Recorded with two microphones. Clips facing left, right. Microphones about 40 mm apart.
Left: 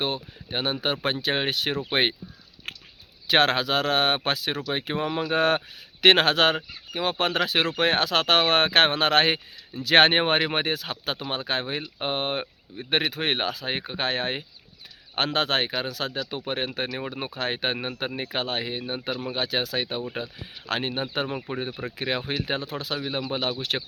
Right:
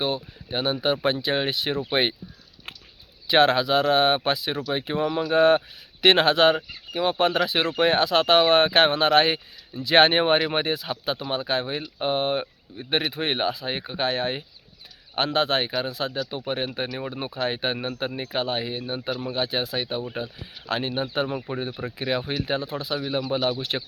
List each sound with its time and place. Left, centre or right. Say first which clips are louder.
0.0 s speech: right 2 dB; left
2.6 s a sound: left 3 dB; left
3.2 s speech: right 2 dB; left
4.5 s speech: right 2 dB; left
5.4 s speech: right 7 dB; left
10.2 s speech: right 2 dB; left
11.6 s speech: right 2 dB; left
16.5 s speech: even; left
20.7 s speech: right 1 dB; left
21.2 s speech: right 1 dB; centre
22.0 s speech: right 2 dB; left